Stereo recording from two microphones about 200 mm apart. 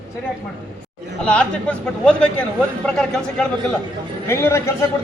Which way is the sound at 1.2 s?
5° left (ahead or behind).